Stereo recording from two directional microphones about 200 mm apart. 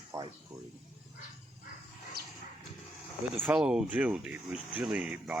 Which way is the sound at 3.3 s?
10° right (ahead or behind).